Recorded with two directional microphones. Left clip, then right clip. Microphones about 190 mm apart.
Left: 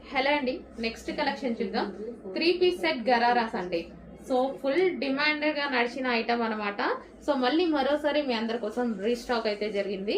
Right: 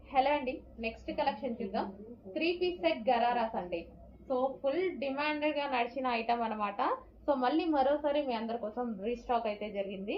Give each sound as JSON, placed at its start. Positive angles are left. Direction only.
{"t": 0.1, "sound": "a woman's voice", "side_deg": 25}